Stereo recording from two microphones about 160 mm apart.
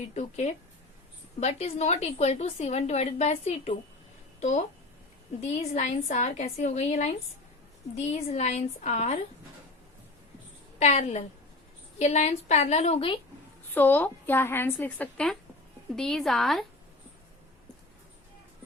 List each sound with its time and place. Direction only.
0.1 s a woman's voice: 45° left (ahead or behind)
5.7 s a woman's voice: 45° left (ahead or behind)
10.8 s a woman's voice: 40° left (ahead or behind)
13.7 s a woman's voice: 10° left (ahead or behind)